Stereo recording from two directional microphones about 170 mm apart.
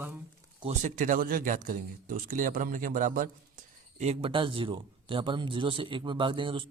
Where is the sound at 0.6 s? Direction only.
40° right (ahead or behind).